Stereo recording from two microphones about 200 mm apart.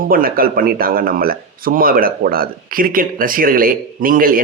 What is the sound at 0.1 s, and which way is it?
Speech, 45° right (ahead or behind).